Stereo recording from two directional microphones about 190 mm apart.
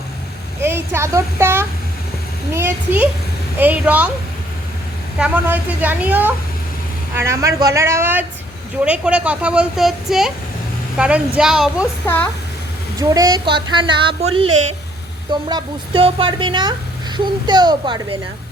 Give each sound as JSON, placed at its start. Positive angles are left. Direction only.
{"t": 0.6, "sound": "a woman's voice", "side_deg": -15}
{"t": 5.2, "sound": "a woman's voice", "side_deg": -10}
{"t": 11.8, "sound": "speech", "side_deg": 10}
{"t": 13.0, "sound": "a woman's voice", "side_deg": -20}